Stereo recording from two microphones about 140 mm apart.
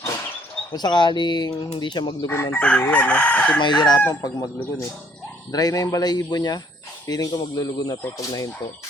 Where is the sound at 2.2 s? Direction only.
15° left (ahead or behind).